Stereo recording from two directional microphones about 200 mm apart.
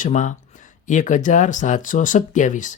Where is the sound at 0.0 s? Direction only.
40° left (ahead or behind).